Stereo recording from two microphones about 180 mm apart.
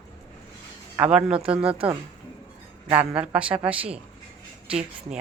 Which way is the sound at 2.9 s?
5° right (ahead or behind).